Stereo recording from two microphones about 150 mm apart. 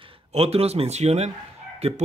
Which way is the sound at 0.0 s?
45° right (ahead or behind).